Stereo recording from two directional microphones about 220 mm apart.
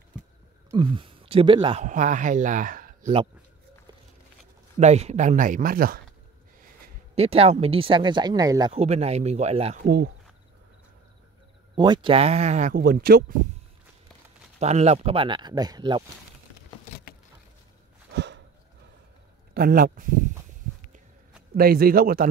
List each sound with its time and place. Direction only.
0.7 s speech: 20° right (ahead or behind)
1.9 s speech: 35° right (ahead or behind)
4.7 s speech: 30° right (ahead or behind)
7.2 s speech: 30° right (ahead or behind)
9.8 s speech: 45° right (ahead or behind)
11.7 s speech: 20° right (ahead or behind); by 13.2 s 40° right (ahead or behind)
14.6 s speech: 30° right (ahead or behind)
18.1 s a sound: 50° right (ahead or behind)
19.5 s speech: 40° right (ahead or behind)
21.5 s speech: 45° right (ahead or behind)